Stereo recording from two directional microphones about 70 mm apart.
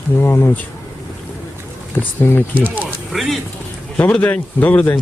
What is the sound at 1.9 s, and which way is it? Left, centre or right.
Speech, left.